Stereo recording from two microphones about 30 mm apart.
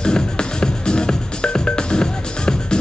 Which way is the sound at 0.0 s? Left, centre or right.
Left.